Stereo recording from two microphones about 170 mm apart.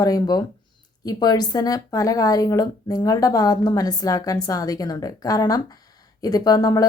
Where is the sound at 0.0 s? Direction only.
20° left (ahead or behind).